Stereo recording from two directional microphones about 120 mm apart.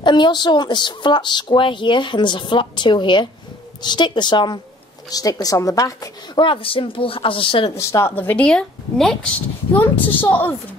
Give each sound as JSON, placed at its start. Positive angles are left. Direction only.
{"t": 0.0, "sound": "a woman's voice", "side_deg": 40}
{"t": 6.4, "sound": "speech", "side_deg": 45}
{"t": 7.7, "sound": "a woman's voice", "side_deg": 25}